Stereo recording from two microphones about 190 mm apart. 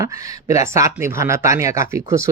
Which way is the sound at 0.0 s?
15° right (ahead or behind).